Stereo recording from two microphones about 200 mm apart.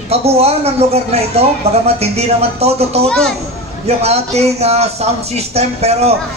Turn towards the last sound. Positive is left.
turn(degrees=-30)  # may be behind; listen again after turning